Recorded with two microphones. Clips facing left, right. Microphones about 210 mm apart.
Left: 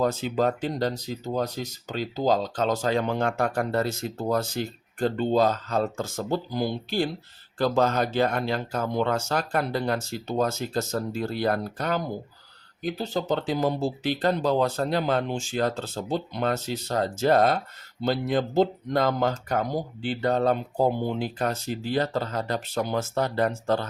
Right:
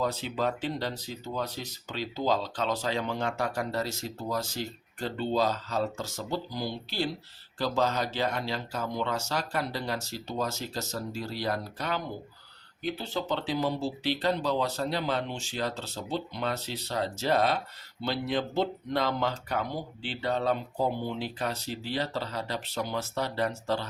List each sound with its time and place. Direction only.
0.0 s speech: 50° left (ahead or behind)